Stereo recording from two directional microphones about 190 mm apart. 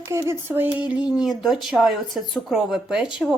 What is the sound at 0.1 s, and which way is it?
Speech, 15° right (ahead or behind).